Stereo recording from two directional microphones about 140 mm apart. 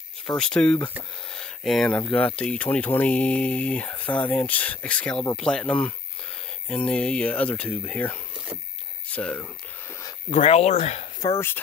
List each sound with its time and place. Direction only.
0.4 s speech: 5° left (ahead or behind)
1.3 s a sound: 5° left (ahead or behind)
2.0 s speech: 10° left (ahead or behind)
10.4 s speech: 50° left (ahead or behind)
11.3 s speech: 15° left (ahead or behind)